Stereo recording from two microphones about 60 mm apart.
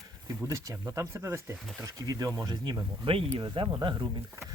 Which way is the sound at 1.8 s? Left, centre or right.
Right.